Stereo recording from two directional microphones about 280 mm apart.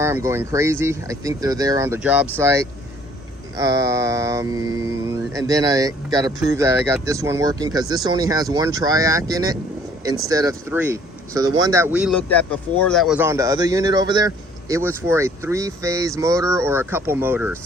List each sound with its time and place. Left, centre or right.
0.0 s speech: centre